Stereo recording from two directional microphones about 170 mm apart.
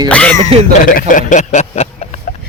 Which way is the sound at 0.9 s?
50° left (ahead or behind).